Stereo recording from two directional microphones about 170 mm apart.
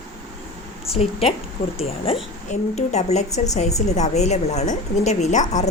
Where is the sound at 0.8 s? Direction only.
35° left (ahead or behind).